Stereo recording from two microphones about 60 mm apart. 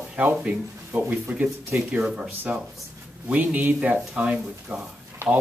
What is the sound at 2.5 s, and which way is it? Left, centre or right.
Speech, right.